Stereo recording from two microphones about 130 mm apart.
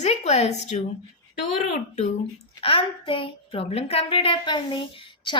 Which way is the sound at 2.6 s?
45° left (ahead or behind).